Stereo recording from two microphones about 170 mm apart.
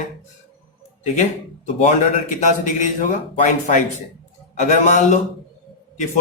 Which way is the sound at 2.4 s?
45° left (ahead or behind).